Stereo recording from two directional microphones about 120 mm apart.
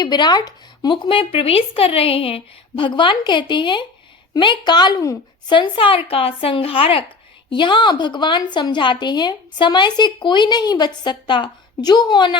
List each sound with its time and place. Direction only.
0.0 s a woman's voice: 35° left (ahead or behind)
1.0 s a woman's voice: 50° left (ahead or behind); by 5.5 s 30° left (ahead or behind)
5.5 s a woman's voice: 50° left (ahead or behind)